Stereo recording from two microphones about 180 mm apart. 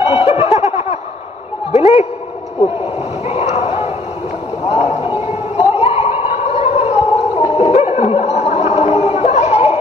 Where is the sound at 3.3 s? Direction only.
35° left (ahead or behind).